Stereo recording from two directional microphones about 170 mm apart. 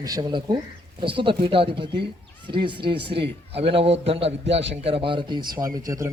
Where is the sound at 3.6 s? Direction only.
35° right (ahead or behind).